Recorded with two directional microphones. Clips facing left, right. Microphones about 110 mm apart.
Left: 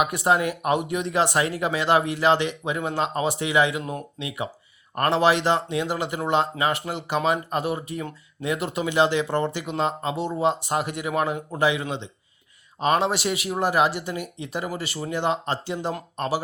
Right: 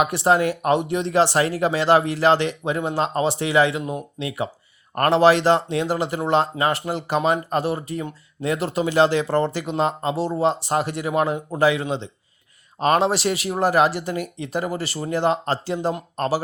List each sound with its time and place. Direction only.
0.0 s speech: 35° right (ahead or behind)